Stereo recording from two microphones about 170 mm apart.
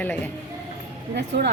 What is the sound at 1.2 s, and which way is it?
Speech, 85° right.